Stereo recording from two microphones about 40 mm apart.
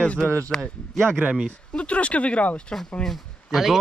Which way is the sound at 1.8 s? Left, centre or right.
Left.